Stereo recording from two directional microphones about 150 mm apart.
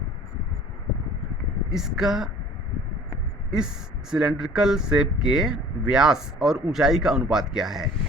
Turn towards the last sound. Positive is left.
turn(degrees=-5)  # may be behind; listen again after turning